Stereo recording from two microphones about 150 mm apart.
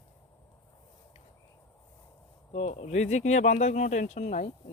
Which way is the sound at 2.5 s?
50° left (ahead or behind).